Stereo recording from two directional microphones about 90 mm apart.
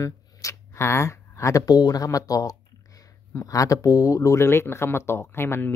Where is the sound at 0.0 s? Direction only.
35° left (ahead or behind).